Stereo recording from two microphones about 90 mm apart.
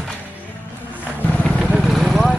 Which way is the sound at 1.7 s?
Centre (ahead or behind).